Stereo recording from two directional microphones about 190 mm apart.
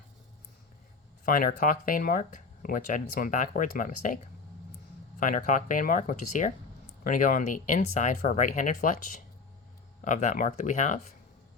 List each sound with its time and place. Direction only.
1.2 s speech: 45° left (ahead or behind)
5.2 s speech: 45° left (ahead or behind)